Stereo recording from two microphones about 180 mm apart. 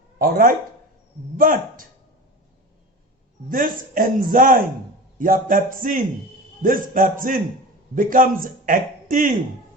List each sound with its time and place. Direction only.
0.2 s a man's voice: 55° right (ahead or behind)
3.5 s a man's voice: 50° right (ahead or behind)